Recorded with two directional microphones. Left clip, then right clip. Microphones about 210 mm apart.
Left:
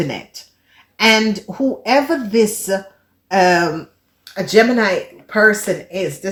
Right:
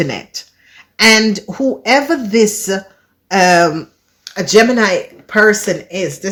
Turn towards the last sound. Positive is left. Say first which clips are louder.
# right 2 dB
turn(degrees=-40)  # may be behind; listen again after turning